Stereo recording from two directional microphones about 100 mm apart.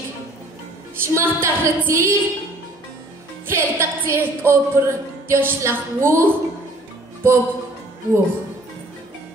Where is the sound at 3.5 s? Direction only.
25° right (ahead or behind).